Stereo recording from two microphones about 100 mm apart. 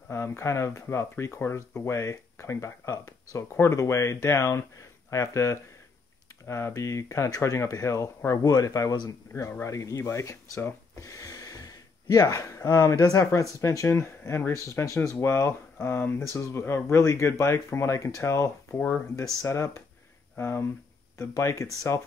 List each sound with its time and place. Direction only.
0.1 s speech: 30° left (ahead or behind)
9.3 s speech: 25° left (ahead or behind)